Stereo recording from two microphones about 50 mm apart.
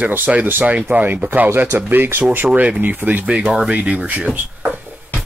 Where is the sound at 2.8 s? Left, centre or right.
Right.